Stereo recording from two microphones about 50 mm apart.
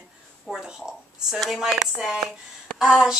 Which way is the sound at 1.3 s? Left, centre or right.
Centre.